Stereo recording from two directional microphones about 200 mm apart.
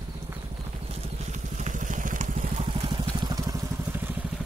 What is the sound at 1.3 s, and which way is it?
Vehicle, 40° right (ahead or behind).